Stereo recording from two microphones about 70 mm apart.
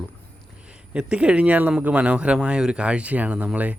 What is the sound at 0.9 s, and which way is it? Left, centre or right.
Speech, centre.